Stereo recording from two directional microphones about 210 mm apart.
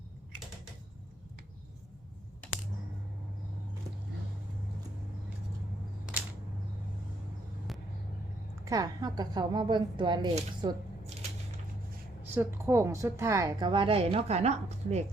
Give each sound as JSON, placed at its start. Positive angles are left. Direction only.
{"t": 8.6, "sound": "a woman's voice", "side_deg": -15}
{"t": 10.3, "sound": "a sound", "side_deg": -25}
{"t": 12.2, "sound": "a woman's voice", "side_deg": -10}